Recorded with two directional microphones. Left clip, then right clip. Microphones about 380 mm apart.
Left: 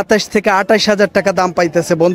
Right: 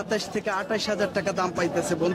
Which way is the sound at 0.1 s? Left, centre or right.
Left.